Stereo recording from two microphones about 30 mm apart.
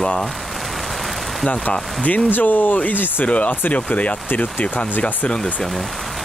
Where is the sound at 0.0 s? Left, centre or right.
Centre.